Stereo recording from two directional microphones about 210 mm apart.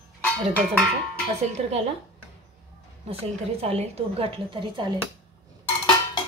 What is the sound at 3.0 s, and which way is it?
A woman's voice, 30° right (ahead or behind).